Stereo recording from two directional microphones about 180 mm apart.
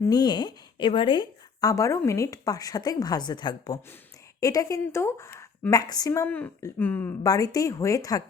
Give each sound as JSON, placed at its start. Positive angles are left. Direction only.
{"t": 0.0, "sound": "a woman's voice", "side_deg": 20}